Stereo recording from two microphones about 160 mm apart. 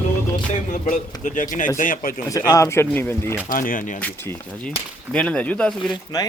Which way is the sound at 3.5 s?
60° left (ahead or behind).